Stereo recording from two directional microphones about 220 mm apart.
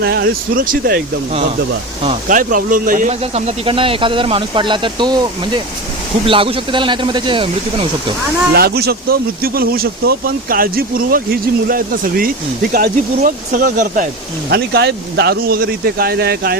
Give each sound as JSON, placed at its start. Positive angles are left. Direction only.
{"t": 0.0, "sound": "speech", "side_deg": -45}
{"t": 2.3, "sound": "speech", "side_deg": -40}
{"t": 8.5, "sound": "speech", "side_deg": -45}
{"t": 14.5, "sound": "speech", "side_deg": -50}